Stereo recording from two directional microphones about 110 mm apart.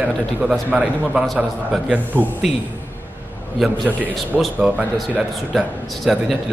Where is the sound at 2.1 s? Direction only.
15° right (ahead or behind).